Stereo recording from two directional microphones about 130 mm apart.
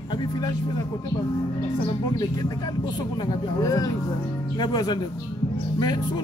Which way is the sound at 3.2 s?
30° left (ahead or behind).